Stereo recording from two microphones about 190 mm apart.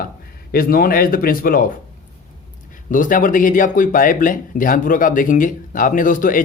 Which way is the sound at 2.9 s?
45° left (ahead or behind).